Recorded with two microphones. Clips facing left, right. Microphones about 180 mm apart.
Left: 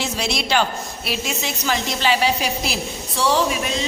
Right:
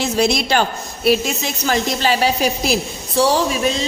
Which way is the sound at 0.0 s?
45° right (ahead or behind).